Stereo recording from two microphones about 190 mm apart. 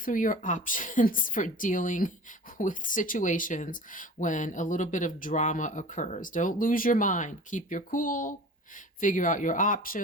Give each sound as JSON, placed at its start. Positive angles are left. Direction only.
{"t": 0.0, "sound": "speech", "side_deg": 45}